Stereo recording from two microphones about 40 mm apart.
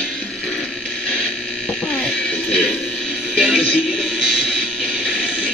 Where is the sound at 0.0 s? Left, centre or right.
Centre.